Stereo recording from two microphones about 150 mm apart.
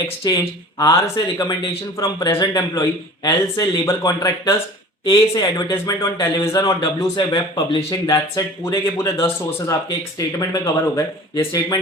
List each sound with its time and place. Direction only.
0.2 s speech: 25° left (ahead or behind)